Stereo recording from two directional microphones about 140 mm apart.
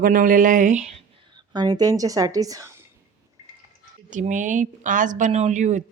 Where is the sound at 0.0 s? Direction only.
75° right (ahead or behind); by 1.0 s 55° right (ahead or behind).